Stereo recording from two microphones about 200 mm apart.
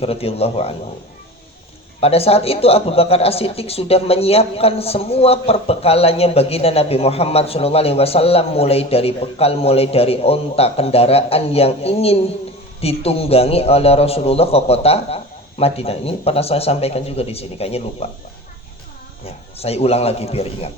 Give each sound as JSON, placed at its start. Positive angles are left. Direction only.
{"t": 0.0, "sound": "a man's voice", "side_deg": 30}
{"t": 2.0, "sound": "a man's voice", "side_deg": 30}
{"t": 19.2, "sound": "a man's voice", "side_deg": 30}